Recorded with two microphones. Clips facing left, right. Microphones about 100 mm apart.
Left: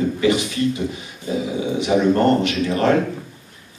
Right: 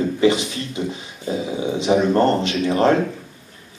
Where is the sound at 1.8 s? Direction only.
25° right (ahead or behind).